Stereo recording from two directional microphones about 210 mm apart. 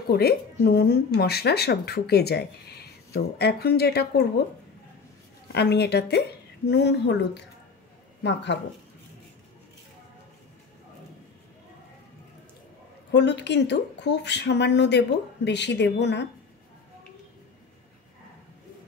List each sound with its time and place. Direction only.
0.1 s speech: 50° left (ahead or behind)
5.5 s speech: 50° left (ahead or behind)
13.1 s speech: 55° left (ahead or behind)